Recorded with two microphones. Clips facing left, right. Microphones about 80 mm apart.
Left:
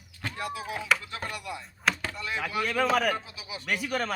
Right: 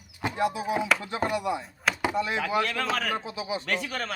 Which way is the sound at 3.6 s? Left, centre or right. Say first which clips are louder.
Left 1 dB; centre.